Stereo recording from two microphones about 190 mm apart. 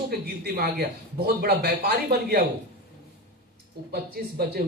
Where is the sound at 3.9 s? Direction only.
55° right (ahead or behind).